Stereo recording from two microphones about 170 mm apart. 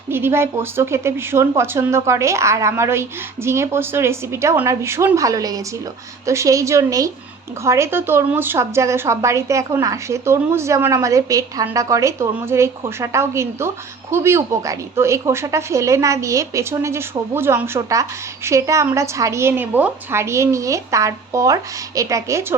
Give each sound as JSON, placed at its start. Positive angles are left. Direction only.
{"t": 0.1, "sound": "a woman's voice", "side_deg": -15}